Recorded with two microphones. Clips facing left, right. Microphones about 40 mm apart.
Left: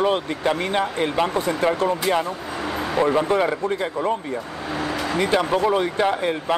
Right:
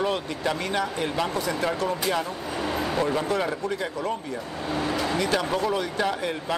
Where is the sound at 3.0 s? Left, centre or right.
Left.